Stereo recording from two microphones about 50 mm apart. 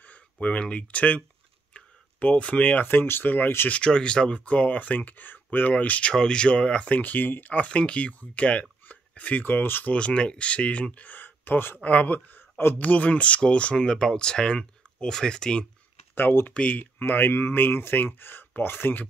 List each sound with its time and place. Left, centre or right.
0.0 s speech: left
1.7 s a sound: left
2.8 s speech: left
3.8 s speech: centre
6.1 s speech: centre
9.5 s speech: left
9.8 s speech: left
11.8 s speech: left
12.7 s speech: left; by 15.6 s centre
16.2 s speech: left
16.5 s speech: left
17.0 s speech: left